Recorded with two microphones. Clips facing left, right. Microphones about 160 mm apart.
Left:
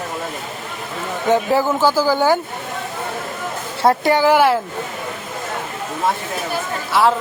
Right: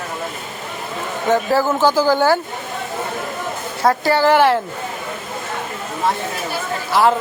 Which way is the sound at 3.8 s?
25° left (ahead or behind).